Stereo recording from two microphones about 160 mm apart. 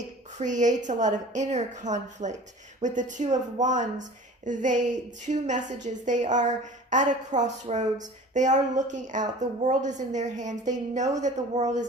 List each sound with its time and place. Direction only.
0.3 s a woman's voice: 50° right (ahead or behind)